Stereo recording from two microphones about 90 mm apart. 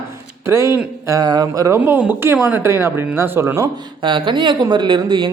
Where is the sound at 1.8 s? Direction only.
20° right (ahead or behind).